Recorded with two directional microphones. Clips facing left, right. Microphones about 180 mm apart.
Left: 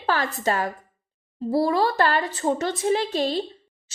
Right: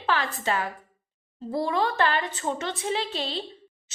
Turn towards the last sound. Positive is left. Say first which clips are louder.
# left 7 dB
turn(degrees=40)  # may be behind; listen again after turning